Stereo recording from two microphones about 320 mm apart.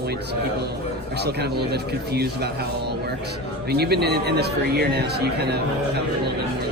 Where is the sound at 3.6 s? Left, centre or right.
Right.